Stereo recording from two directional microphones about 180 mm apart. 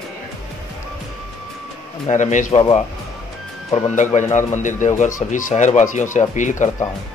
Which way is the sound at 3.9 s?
45° left (ahead or behind).